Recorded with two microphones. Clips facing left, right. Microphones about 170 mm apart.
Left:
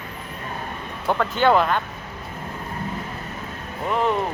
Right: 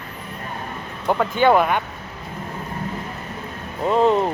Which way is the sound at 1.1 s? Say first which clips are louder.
Right 2 dB; 10° right (ahead or behind).